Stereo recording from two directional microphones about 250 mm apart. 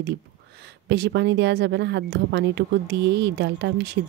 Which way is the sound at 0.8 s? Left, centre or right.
Right.